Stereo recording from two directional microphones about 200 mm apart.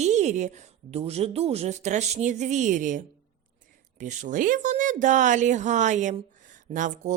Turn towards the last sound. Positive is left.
turn(degrees=-40)  # may be behind; listen again after turning